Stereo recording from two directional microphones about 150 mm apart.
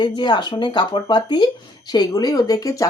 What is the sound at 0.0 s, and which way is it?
Speech, 30° left (ahead or behind).